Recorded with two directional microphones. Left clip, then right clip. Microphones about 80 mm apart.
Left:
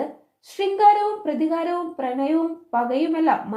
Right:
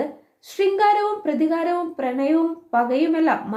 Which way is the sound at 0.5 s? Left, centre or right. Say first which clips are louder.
Left 1 dB; left.